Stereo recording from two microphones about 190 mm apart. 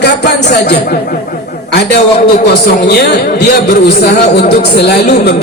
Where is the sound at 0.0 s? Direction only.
65° left (ahead or behind).